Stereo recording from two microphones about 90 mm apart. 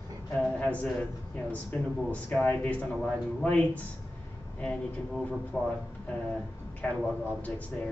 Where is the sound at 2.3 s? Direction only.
5° left (ahead or behind).